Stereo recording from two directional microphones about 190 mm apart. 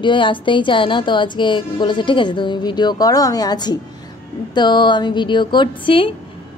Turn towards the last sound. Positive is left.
turn(degrees=25)  # may be behind; listen again after turning